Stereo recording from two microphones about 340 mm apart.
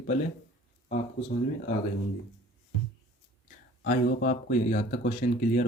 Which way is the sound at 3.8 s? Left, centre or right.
Left.